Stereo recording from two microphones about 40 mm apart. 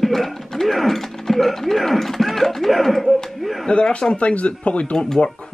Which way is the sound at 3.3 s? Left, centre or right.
Centre.